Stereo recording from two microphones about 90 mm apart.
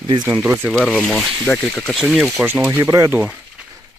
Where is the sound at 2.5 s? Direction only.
25° right (ahead or behind).